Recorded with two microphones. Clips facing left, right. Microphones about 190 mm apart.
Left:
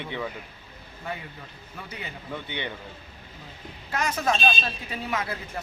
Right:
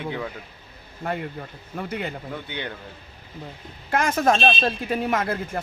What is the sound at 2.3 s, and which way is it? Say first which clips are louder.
Speech: right 1 dB; centre (ahead or behind).